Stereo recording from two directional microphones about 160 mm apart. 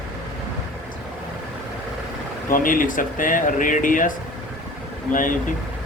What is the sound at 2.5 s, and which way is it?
Speech, 60° left (ahead or behind).